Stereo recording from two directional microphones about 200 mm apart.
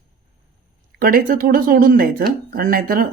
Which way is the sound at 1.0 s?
45° right (ahead or behind).